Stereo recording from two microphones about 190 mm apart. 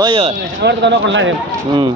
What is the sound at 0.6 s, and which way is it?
Speech, 70° right (ahead or behind).